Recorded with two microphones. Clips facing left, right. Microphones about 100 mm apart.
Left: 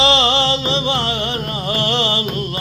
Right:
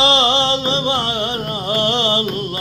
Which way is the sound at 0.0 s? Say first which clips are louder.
Even; 40° right (ahead or behind).